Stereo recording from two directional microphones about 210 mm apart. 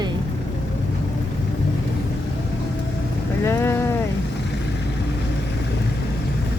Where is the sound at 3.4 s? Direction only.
10° left (ahead or behind).